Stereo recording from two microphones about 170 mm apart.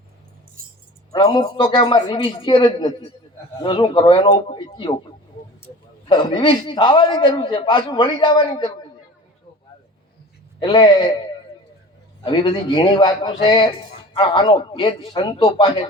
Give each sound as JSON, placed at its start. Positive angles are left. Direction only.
{"t": 0.6, "sound": "keys jangling", "side_deg": -55}
{"t": 1.1, "sound": "a man's voice", "side_deg": 25}
{"t": 6.1, "sound": "a man's voice", "side_deg": 25}
{"t": 10.6, "sound": "a man's voice", "side_deg": 25}